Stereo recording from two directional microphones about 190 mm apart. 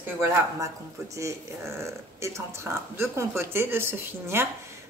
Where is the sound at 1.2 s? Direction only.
15° right (ahead or behind).